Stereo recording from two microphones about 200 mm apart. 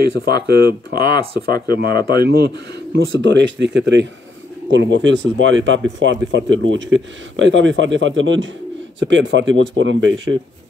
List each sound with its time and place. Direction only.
0.0 s speech: 50° right (ahead or behind)
0.9 s speech: 20° left (ahead or behind)
1.7 s speech: 50° right (ahead or behind); by 10.2 s 70° right (ahead or behind)